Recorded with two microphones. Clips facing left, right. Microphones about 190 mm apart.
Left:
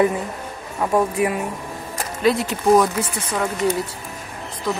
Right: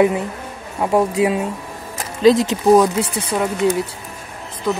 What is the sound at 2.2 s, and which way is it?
Speech, 90° right.